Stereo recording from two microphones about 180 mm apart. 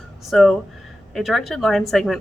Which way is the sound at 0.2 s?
Centre (ahead or behind).